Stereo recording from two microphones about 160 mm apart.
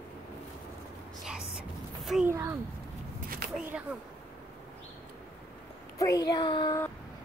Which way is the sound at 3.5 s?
5° right (ahead or behind).